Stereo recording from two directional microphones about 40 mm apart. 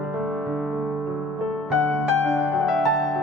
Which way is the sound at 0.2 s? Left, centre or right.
Centre.